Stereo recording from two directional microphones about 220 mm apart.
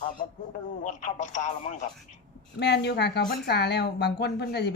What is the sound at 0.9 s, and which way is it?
Speech, 35° left (ahead or behind).